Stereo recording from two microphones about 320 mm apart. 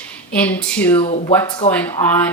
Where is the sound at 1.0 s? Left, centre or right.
Centre.